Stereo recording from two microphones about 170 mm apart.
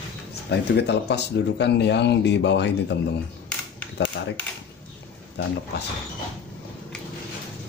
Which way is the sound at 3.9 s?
90° left.